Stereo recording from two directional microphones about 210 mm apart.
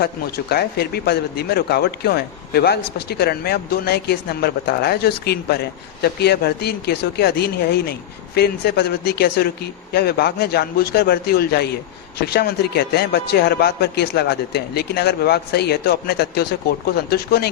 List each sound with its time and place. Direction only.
0.0 s speech: 50° left (ahead or behind)